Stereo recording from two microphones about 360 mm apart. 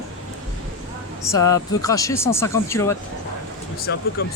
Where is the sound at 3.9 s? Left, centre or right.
Left.